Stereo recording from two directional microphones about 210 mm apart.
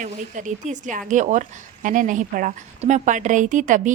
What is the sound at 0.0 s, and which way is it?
A woman's voice, 35° right (ahead or behind).